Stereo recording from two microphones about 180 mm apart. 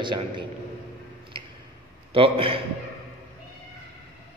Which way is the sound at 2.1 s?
30° right (ahead or behind).